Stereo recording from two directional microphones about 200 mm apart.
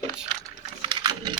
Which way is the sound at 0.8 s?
25° right (ahead or behind).